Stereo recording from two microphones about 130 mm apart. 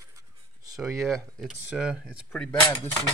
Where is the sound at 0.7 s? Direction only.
Centre (ahead or behind).